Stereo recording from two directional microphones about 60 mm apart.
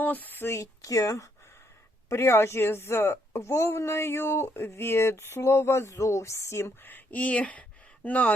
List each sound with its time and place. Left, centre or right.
0.0 s speech: left
0.5 s speech: left
2.0 s a woman's voice: left
6.8 s speech: left